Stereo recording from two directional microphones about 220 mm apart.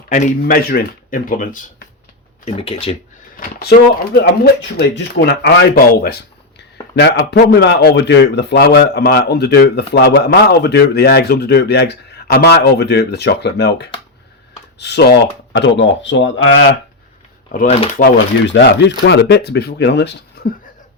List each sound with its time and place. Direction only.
0.1 s speech: 35° left (ahead or behind)
2.4 s speech: 25° left (ahead or behind)
3.3 s speech: 40° left (ahead or behind)
4.8 s speech: 50° left (ahead or behind)
17.5 s speech: 40° left (ahead or behind)
17.9 s speech: 50° left (ahead or behind)